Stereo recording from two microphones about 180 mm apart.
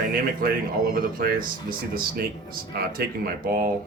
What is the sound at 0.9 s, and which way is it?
Speech, 55° right (ahead or behind).